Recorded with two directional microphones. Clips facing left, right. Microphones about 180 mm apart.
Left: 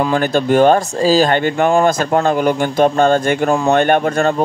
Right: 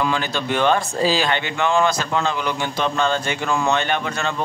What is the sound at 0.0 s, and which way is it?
A man's voice, 50° left (ahead or behind).